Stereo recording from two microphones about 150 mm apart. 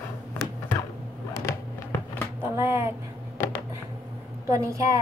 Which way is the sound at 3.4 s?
15° left (ahead or behind).